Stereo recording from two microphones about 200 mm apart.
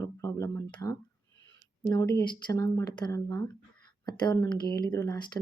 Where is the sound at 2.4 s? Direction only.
20° left (ahead or behind).